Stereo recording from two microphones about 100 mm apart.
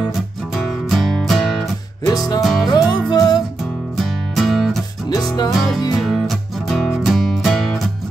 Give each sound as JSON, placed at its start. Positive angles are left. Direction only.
{"t": 0.6, "sound": "music", "side_deg": 0}
{"t": 2.0, "sound": "music", "side_deg": 40}
{"t": 4.0, "sound": "music", "side_deg": 0}
{"t": 5.1, "sound": "music", "side_deg": 40}
{"t": 5.5, "sound": "music", "side_deg": 0}